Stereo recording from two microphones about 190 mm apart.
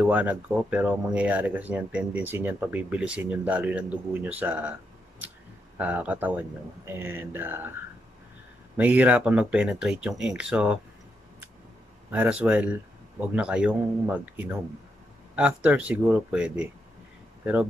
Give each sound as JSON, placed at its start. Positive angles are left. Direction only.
{"t": 0.0, "sound": "speech", "side_deg": -10}
{"t": 5.8, "sound": "speech", "side_deg": -10}
{"t": 8.7, "sound": "speech", "side_deg": -10}
{"t": 12.1, "sound": "speech", "side_deg": -5}